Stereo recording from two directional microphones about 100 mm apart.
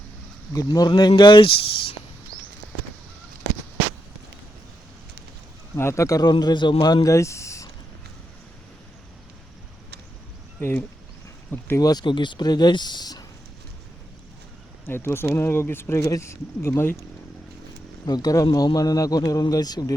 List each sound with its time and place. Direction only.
0.5 s speech: 40° left (ahead or behind); by 2.0 s 60° left (ahead or behind)
5.7 s speech: 30° left (ahead or behind)
6.4 s a man's voice: 50° left (ahead or behind); by 7.7 s 30° left (ahead or behind)
10.6 s speech: 25° left (ahead or behind)
11.8 s speech: 40° left (ahead or behind)
14.8 s speech: 25° left (ahead or behind)
18.0 s a man's voice: 40° left (ahead or behind)